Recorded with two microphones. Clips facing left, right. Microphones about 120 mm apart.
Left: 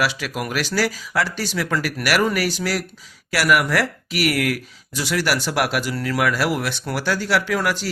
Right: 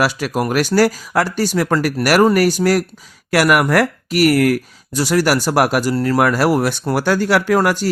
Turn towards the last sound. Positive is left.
turn(degrees=-45)  # may be behind; listen again after turning